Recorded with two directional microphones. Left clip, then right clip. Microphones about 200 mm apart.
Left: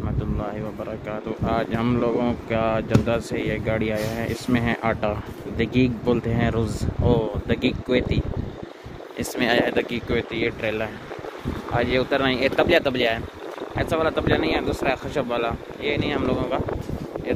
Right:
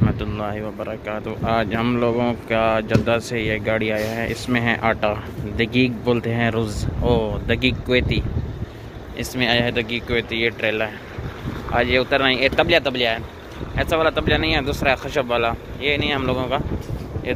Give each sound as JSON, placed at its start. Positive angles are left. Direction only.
{"t": 0.0, "sound": "speech", "side_deg": 0}
{"t": 9.2, "sound": "speech", "side_deg": 30}
{"t": 10.0, "sound": "speech", "side_deg": 10}
{"t": 13.8, "sound": "speech", "side_deg": 10}